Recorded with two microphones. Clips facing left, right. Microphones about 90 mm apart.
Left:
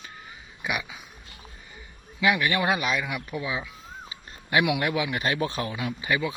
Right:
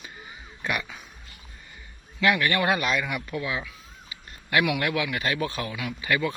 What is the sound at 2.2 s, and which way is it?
A man's voice, 15° left (ahead or behind).